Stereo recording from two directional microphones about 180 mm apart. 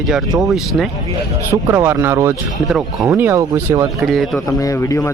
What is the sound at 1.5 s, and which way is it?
Speech, 15° right (ahead or behind).